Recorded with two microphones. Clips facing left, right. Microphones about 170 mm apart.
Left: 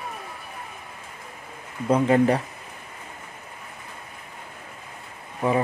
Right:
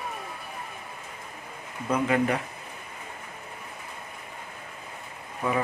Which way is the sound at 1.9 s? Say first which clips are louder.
Left 6 dB; 30° left (ahead or behind).